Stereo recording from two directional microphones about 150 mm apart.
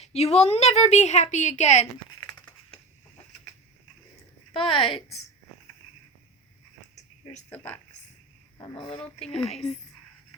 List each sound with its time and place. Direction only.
0.0 s a woman's voice: 45° left (ahead or behind)
2.0 s crushing: 30° left (ahead or behind)
4.5 s speech: 35° left (ahead or behind)
6.9 s a sound: 50° left (ahead or behind)
7.5 s speech: 10° left (ahead or behind)
8.5 s a woman's voice: 35° left (ahead or behind)